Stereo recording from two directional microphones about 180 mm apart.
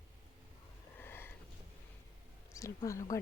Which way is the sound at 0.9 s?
10° left (ahead or behind).